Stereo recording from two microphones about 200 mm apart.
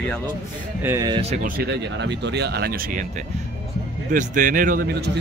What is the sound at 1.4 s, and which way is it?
Speech, 50° right (ahead or behind).